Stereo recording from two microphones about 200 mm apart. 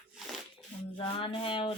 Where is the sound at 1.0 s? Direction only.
25° left (ahead or behind).